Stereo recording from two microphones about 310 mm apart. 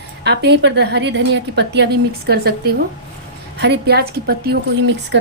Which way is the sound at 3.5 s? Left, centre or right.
Right.